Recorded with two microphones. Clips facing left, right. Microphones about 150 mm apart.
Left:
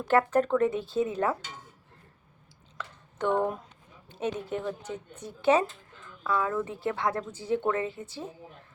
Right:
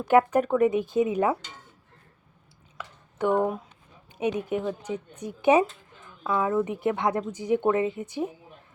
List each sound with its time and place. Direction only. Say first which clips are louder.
0.1 s a woman's voice: right 3 dB; 15° right (ahead or behind)
2.7 s a sound: right 2 dB; 10° right (ahead or behind)
4.1 s a woman's voice: right 5 dB; 15° right (ahead or behind)